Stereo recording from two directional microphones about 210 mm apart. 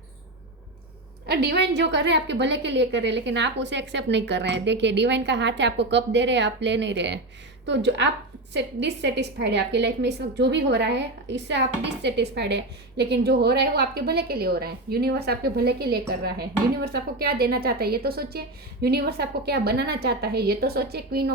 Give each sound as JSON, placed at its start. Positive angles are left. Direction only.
{"t": 1.3, "sound": "a woman's voice", "side_deg": -50}